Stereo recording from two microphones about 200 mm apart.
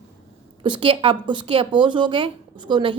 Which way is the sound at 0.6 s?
25° right (ahead or behind).